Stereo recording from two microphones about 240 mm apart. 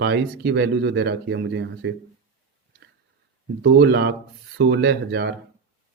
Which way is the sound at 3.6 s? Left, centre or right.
Right.